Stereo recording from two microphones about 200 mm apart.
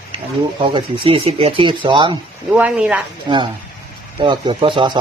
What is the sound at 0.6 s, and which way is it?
Speech, 25° right (ahead or behind).